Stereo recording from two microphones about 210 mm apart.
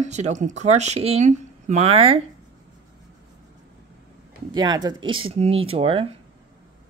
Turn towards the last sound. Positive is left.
turn(degrees=-25)  # may be behind; listen again after turning